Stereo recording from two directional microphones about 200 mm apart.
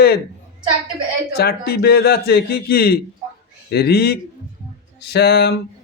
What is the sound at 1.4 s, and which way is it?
A man's voice, 50° left (ahead or behind).